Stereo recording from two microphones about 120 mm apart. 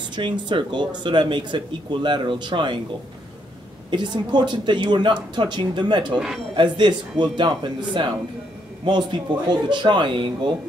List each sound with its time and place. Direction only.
0.1 s speech: 40° right (ahead or behind)
3.9 s speech: 40° right (ahead or behind)
6.1 s speech: centre (ahead or behind)
6.5 s speech: 40° right (ahead or behind)